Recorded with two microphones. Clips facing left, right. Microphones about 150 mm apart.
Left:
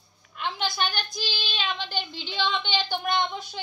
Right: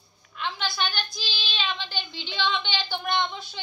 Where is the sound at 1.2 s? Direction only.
15° left (ahead or behind).